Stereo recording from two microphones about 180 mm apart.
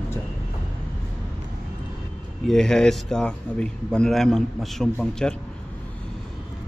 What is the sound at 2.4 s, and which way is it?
A man's voice, 5° left (ahead or behind).